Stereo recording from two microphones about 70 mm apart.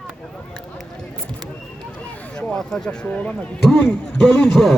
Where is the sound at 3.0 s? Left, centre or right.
Centre.